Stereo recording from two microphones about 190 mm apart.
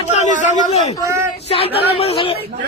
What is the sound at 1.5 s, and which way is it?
Speech, 30° left (ahead or behind).